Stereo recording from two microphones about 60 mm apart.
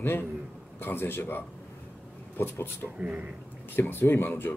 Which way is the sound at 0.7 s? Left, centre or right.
Left.